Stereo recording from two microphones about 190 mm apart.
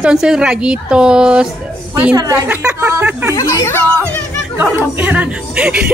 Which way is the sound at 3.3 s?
15° left (ahead or behind).